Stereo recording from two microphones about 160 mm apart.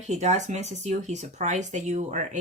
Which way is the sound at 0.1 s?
45° right (ahead or behind).